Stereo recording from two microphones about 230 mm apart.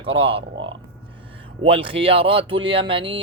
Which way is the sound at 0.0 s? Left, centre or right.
Right.